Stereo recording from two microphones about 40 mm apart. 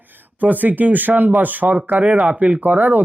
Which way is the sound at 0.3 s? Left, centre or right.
Right.